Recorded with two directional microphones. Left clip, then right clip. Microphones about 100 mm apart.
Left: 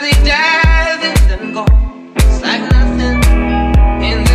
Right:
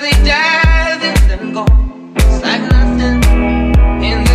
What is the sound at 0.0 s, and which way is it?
Music, 20° right (ahead or behind).